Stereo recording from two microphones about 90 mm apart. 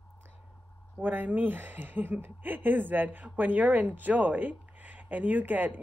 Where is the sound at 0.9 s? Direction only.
20° right (ahead or behind).